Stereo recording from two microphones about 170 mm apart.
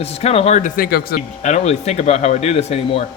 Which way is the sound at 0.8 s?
65° left (ahead or behind).